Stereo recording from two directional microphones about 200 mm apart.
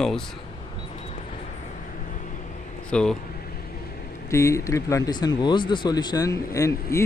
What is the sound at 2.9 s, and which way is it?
Speech, 5° left (ahead or behind).